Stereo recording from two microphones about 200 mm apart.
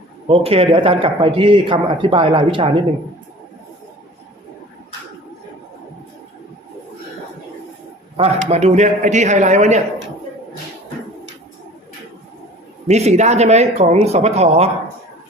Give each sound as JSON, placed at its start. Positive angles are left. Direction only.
{"t": 0.3, "sound": "a man's voice", "side_deg": -30}
{"t": 8.4, "sound": "speech", "side_deg": -35}
{"t": 12.9, "sound": "speech", "side_deg": -35}